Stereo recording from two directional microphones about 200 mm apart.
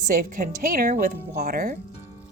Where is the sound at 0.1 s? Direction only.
40° right (ahead or behind).